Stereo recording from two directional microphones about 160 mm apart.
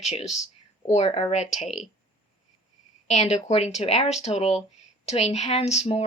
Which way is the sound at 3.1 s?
45° left (ahead or behind).